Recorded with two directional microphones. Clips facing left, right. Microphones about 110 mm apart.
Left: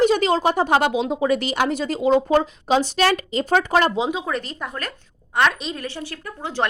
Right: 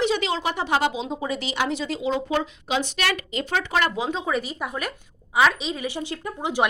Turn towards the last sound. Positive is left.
turn(degrees=-15)  # may be behind; listen again after turning